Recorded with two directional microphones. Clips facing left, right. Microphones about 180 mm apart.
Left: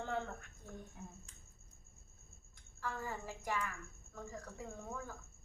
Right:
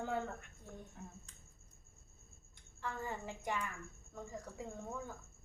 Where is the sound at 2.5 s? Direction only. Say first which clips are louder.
Even; 20° right (ahead or behind).